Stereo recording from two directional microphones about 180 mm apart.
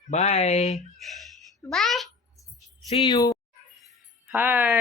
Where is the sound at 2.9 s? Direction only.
25° left (ahead or behind).